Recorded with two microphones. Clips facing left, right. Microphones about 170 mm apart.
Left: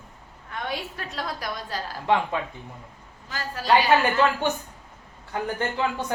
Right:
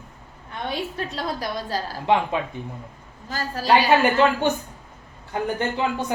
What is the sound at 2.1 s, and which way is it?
Speech, 20° right (ahead or behind).